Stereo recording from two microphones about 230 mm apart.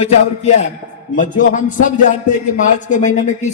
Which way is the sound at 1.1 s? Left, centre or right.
Left.